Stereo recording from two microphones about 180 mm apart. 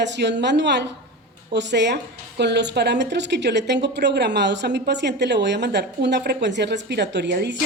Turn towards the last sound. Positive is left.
turn(degrees=-65)  # may be behind; listen again after turning